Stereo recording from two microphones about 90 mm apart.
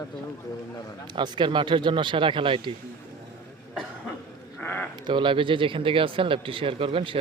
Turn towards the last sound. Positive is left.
turn(degrees=-80)